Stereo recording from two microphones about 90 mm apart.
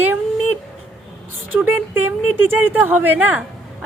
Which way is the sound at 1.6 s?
20° right (ahead or behind).